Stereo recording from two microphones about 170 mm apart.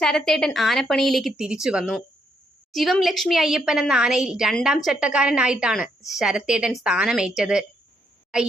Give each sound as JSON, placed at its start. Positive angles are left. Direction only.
{"t": 0.0, "sound": "a woman's voice", "side_deg": 5}